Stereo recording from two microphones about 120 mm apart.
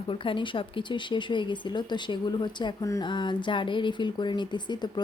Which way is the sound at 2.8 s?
25° left (ahead or behind).